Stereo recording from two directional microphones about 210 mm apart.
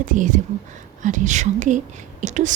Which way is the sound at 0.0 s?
40° right (ahead or behind).